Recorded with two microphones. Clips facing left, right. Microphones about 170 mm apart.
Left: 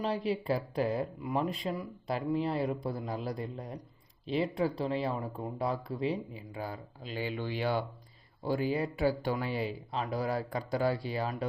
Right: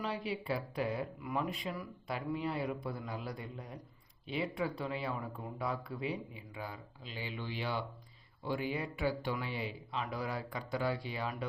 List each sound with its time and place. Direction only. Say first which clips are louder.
0.0 s speech: left 6 dB; 35° left (ahead or behind)